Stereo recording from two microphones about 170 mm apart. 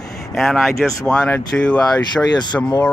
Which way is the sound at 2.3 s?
25° left (ahead or behind).